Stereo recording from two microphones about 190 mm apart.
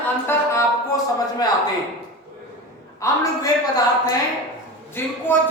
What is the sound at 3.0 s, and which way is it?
Speech, 20° left (ahead or behind).